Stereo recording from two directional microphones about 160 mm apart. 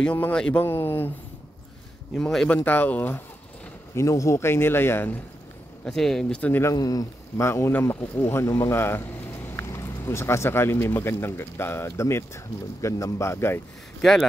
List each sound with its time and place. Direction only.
0.0 s speech: 10° left (ahead or behind)
2.1 s speech: centre (ahead or behind)
5.9 s speech: 5° left (ahead or behind)
6.7 s speech: 25° left (ahead or behind)